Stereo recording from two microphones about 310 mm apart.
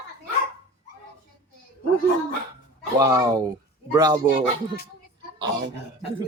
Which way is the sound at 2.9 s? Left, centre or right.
Centre.